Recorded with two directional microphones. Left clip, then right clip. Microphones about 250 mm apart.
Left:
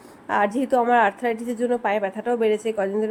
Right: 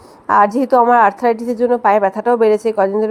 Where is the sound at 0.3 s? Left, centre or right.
Right.